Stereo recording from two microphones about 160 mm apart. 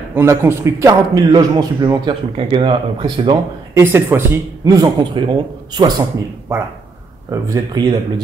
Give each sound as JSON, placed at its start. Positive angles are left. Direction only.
{"t": 0.1, "sound": "a man's voice", "side_deg": -15}
{"t": 3.7, "sound": "a man's voice", "side_deg": -15}